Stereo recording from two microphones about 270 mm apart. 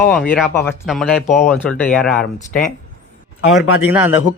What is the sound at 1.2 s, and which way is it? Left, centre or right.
Speech, left.